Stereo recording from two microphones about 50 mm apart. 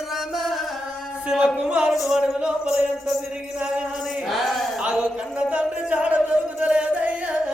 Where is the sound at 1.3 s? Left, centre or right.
Centre.